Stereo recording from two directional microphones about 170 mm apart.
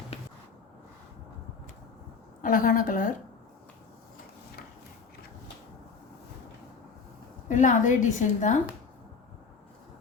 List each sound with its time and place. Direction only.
2.4 s a woman's voice: 55° left (ahead or behind)
7.4 s a woman's voice: 50° left (ahead or behind)